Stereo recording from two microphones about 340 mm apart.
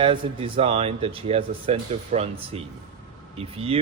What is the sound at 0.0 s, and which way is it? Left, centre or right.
Speech, centre.